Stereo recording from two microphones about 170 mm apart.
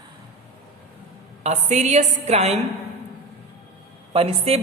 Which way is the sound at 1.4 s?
40° right (ahead or behind).